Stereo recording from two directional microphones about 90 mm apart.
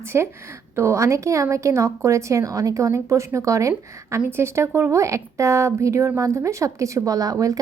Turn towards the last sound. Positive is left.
turn(degrees=-40)  # may be behind; listen again after turning